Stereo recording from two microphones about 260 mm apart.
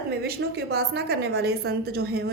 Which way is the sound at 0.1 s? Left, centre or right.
Right.